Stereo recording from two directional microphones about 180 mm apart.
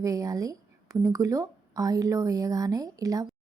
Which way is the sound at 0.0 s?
20° right (ahead or behind).